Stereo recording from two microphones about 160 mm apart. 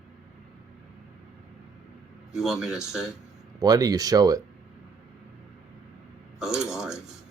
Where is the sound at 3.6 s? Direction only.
25° right (ahead or behind).